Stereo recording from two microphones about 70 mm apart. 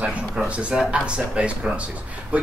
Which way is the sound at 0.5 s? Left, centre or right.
Centre.